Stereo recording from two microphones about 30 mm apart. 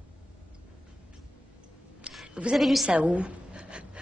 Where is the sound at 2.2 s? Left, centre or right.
Right.